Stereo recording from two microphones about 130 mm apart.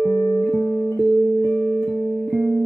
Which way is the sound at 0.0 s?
15° left (ahead or behind).